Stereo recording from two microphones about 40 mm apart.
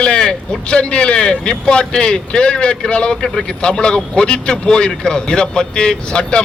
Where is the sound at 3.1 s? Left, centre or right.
Centre.